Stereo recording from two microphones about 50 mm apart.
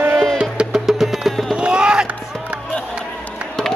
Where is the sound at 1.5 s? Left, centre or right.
Centre.